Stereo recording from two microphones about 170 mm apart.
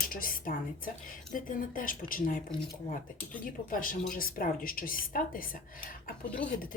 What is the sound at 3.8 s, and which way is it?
Speech, 55° left (ahead or behind).